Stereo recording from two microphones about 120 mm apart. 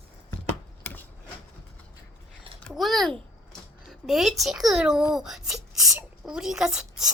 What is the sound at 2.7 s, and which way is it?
Speech, centre (ahead or behind).